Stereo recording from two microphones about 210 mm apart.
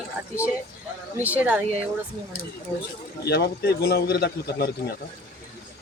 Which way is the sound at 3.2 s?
50° left (ahead or behind).